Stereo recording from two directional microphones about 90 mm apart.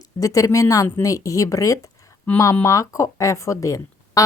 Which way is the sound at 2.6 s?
35° left (ahead or behind).